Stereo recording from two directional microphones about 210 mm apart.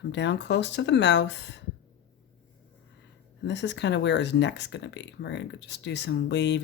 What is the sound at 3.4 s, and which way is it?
Speech, 55° left (ahead or behind).